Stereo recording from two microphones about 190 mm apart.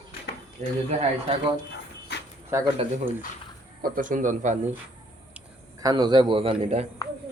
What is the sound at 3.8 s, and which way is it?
Speech, 45° right (ahead or behind).